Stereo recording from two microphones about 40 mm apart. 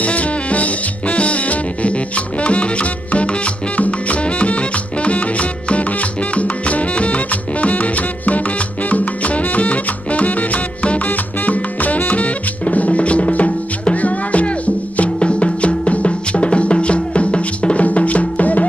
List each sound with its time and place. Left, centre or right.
0.0 s music: left
11.1 s salsa music: left
12.1 s music: left